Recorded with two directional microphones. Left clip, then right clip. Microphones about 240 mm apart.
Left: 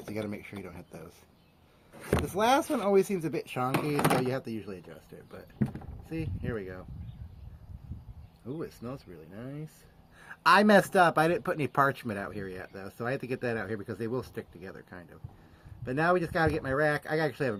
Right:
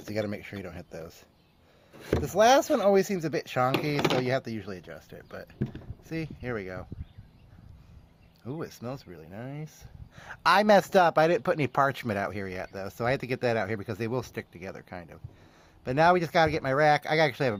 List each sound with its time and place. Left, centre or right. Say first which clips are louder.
0.0 s speech: right 5 dB; right
2.2 s speech: right 6 dB; right
8.4 s speech: right 2 dB; right